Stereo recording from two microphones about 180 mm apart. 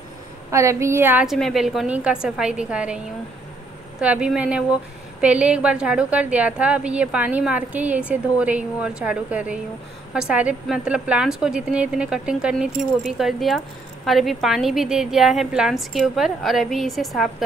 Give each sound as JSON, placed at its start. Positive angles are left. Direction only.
{"t": 0.5, "sound": "a woman's voice", "side_deg": -15}
{"t": 4.0, "sound": "a woman's voice", "side_deg": -5}